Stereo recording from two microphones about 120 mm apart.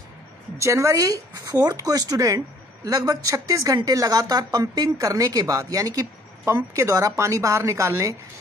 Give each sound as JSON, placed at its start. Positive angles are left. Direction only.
{"t": 0.6, "sound": "speech", "side_deg": -25}